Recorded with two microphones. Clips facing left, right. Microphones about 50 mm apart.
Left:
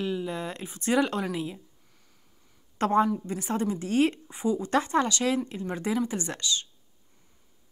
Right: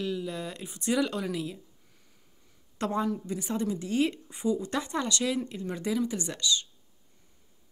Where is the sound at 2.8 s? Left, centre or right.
Left.